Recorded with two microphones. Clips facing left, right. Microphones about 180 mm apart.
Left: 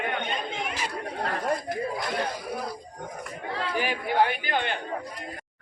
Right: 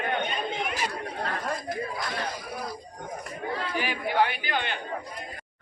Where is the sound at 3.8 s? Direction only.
45° left (ahead or behind).